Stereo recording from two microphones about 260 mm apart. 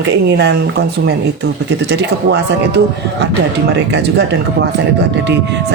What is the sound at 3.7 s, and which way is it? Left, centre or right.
Speech, right.